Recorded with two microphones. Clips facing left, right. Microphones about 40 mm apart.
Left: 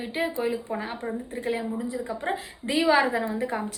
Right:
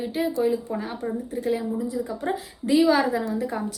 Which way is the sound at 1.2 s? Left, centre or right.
Left.